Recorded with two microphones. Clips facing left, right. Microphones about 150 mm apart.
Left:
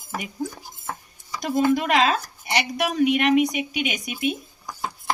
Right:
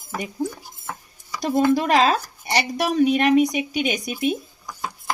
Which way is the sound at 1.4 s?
35° right (ahead or behind).